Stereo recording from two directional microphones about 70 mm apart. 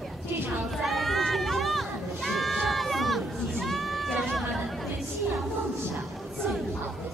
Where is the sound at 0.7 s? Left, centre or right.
Centre.